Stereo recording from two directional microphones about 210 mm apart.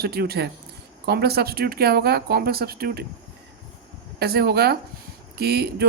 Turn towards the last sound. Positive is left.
turn(degrees=-50)  # may be behind; listen again after turning